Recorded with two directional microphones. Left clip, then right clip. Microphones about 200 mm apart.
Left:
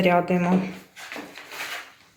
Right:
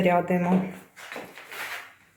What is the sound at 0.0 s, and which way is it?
Speech, centre (ahead or behind).